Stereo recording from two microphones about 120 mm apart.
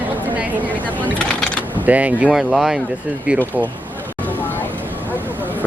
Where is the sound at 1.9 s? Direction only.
10° right (ahead or behind).